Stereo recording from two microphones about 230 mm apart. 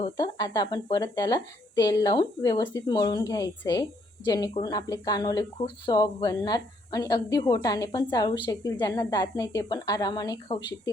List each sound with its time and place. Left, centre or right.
0.0 s speech: centre